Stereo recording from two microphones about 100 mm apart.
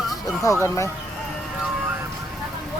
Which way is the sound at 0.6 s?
30° left (ahead or behind).